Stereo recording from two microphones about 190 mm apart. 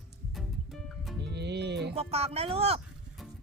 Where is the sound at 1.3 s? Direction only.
65° right (ahead or behind).